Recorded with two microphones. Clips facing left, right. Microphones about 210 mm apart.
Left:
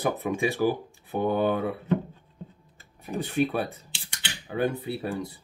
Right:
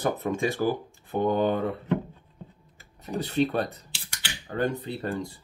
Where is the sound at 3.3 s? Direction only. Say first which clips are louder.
Right 1 dB; 10° left (ahead or behind).